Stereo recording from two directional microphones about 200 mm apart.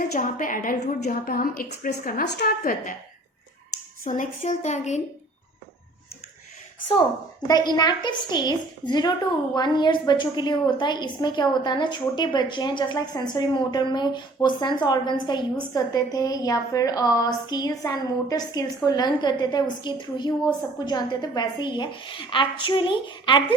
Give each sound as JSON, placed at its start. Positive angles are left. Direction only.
{"t": 0.0, "sound": "a woman's voice", "side_deg": 40}
{"t": 4.0, "sound": "a woman's voice", "side_deg": 40}
{"t": 7.4, "sound": "a woman's voice", "side_deg": 20}